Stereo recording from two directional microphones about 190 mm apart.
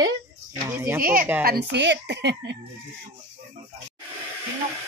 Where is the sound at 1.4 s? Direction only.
60° right (ahead or behind).